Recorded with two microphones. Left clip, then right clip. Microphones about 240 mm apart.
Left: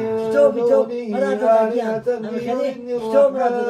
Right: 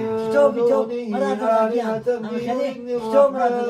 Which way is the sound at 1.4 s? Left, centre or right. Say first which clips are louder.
Left 3 dB; centre.